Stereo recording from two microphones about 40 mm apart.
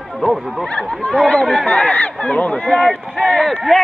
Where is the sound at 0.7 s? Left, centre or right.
Left.